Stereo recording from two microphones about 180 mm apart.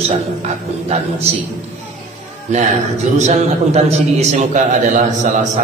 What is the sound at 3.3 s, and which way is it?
A man's voice, 35° right (ahead or behind).